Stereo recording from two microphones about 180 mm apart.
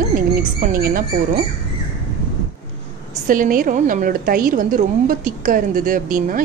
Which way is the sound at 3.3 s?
50° right (ahead or behind).